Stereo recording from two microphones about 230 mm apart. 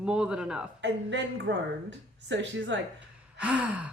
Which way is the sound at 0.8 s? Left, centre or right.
Right.